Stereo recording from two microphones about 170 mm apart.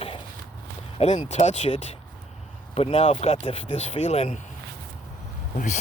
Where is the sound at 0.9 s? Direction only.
40° left (ahead or behind).